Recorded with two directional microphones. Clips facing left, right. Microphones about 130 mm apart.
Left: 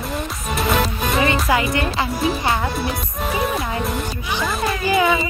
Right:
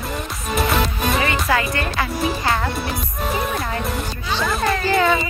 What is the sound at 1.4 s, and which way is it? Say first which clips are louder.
Music: left 2 dB; 20° left (ahead or behind).